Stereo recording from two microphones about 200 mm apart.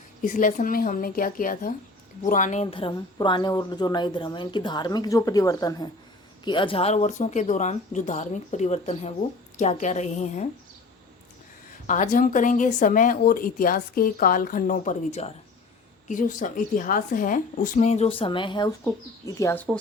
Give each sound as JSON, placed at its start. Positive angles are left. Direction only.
{"t": 0.2, "sound": "a woman's voice", "side_deg": 40}
{"t": 11.9, "sound": "speech", "side_deg": 40}